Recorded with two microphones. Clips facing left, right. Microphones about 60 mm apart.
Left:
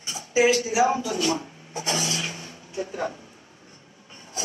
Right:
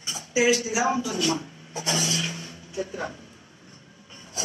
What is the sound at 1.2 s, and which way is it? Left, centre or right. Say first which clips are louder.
Rub: left 1 dB; left.